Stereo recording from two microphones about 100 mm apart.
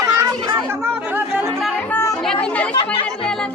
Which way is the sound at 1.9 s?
25° left (ahead or behind).